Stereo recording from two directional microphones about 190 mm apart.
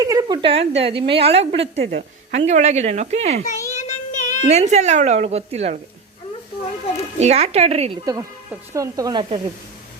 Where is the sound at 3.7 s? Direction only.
40° left (ahead or behind).